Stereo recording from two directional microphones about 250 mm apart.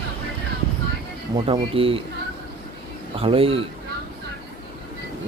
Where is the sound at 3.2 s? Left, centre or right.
Right.